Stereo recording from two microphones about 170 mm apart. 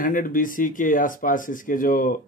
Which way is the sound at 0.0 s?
55° left (ahead or behind).